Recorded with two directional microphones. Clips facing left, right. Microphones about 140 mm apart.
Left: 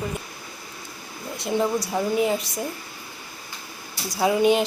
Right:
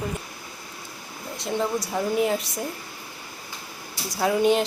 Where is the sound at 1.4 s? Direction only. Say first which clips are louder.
Left 3 dB; 5° left (ahead or behind).